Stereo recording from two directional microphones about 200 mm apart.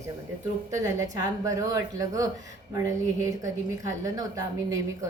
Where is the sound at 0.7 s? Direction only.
15° right (ahead or behind).